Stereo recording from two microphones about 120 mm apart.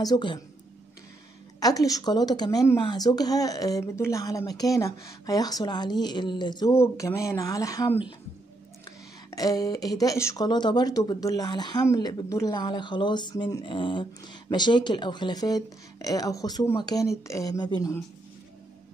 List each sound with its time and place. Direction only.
0.0 s speech: 35° left (ahead or behind)
1.6 s speech: 30° left (ahead or behind)
6.7 s speech: 20° left (ahead or behind)
9.3 s speech: 30° left (ahead or behind)